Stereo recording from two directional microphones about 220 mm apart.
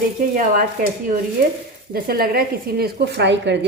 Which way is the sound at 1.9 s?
40° right (ahead or behind).